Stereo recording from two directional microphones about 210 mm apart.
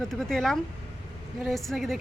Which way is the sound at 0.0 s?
Centre (ahead or behind).